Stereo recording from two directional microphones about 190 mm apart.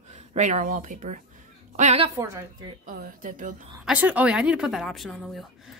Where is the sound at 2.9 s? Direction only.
45° right (ahead or behind).